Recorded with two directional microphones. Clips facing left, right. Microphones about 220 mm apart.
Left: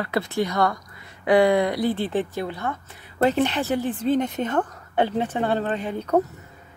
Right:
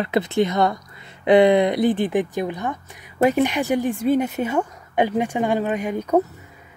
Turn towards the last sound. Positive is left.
turn(degrees=-15)  # may be behind; listen again after turning